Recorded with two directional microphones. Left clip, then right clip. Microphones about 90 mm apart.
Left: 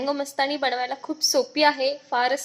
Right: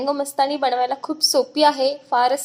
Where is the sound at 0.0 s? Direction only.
20° right (ahead or behind).